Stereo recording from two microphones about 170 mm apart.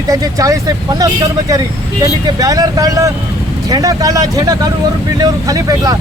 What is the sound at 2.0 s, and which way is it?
Speech, 20° right (ahead or behind).